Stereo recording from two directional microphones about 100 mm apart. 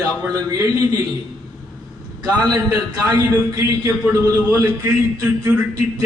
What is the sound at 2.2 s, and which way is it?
A man's voice, 40° right (ahead or behind).